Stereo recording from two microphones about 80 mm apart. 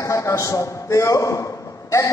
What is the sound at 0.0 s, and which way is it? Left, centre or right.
Speech, left.